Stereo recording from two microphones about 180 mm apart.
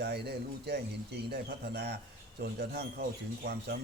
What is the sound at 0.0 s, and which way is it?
A man's voice, 65° right (ahead or behind).